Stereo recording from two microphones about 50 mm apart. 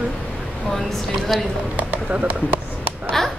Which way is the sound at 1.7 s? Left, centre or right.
Right.